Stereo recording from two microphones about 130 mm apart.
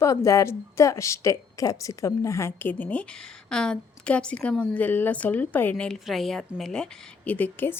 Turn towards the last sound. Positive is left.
turn(degrees=15)  # may be behind; listen again after turning